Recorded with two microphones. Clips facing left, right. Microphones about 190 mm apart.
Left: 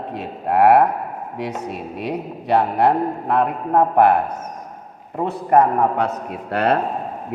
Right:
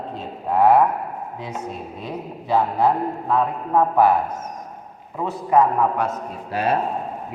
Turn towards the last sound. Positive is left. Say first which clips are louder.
# left 3 dB
turn(degrees=65)  # may be behind; listen again after turning